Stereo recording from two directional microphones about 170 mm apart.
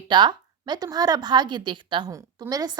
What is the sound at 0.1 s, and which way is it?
A woman's voice, 25° right (ahead or behind).